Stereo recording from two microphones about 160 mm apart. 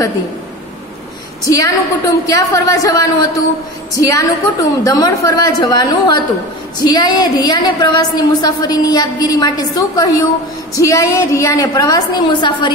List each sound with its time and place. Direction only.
1.5 s a woman's voice: 20° left (ahead or behind)